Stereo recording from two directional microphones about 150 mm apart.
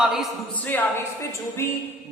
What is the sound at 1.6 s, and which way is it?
Speech, 20° left (ahead or behind).